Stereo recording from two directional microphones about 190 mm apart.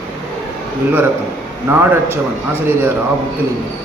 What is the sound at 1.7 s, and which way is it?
Speech, 10° right (ahead or behind).